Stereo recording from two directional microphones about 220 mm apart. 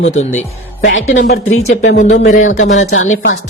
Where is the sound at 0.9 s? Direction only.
60° left (ahead or behind).